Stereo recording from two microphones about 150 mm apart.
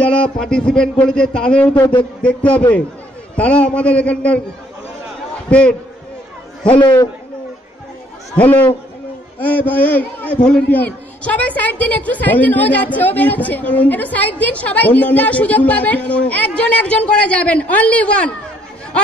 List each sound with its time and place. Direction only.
0.0 s a man's voice: 10° left (ahead or behind)
1.8 s speech: 30° left (ahead or behind)
2.2 s a man's voice: 10° left (ahead or behind)
5.5 s a man's voice: 5° left (ahead or behind)
8.4 s a man's voice: 10° left (ahead or behind)